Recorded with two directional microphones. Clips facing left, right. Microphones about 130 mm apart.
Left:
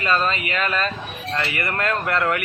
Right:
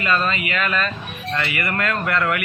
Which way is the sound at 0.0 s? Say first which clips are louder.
Even; 35° left (ahead or behind).